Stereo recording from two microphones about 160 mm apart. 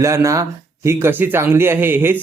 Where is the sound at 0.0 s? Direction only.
15° right (ahead or behind).